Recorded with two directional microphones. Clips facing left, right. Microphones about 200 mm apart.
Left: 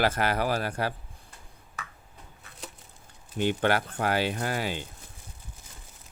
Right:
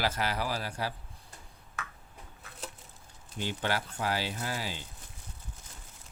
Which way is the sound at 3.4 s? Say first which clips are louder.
Left 8 dB; 60° left (ahead or behind).